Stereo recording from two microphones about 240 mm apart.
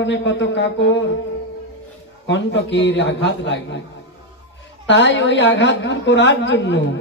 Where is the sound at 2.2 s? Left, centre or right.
Left.